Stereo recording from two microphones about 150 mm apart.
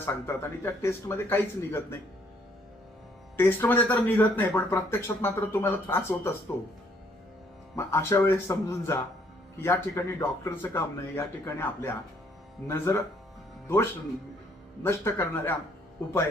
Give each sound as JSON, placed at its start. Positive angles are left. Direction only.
{"t": 0.0, "sound": "speech", "side_deg": 15}
{"t": 3.3, "sound": "speech", "side_deg": 15}
{"t": 7.8, "sound": "speech", "side_deg": 20}
{"t": 14.8, "sound": "speech", "side_deg": 15}